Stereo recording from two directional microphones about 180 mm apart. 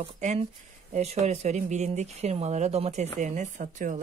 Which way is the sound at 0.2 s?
40° right (ahead or behind).